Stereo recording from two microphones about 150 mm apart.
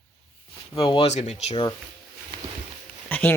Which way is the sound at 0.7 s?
40° left (ahead or behind).